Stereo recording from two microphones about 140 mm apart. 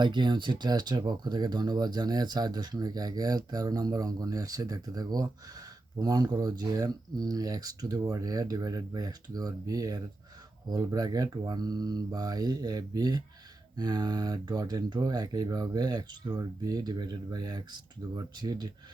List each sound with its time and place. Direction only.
0.0 s speech: 30° right (ahead or behind)